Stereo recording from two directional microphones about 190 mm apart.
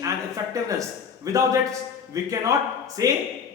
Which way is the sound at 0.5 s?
15° right (ahead or behind).